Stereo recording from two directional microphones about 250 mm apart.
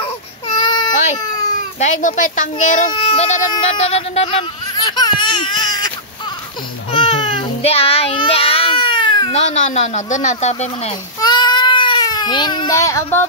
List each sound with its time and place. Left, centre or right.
0.0 s baby cry: centre
1.8 s a child's voice: left
2.9 s speech: left
6.9 s child singing: left
11.1 s baby cry: centre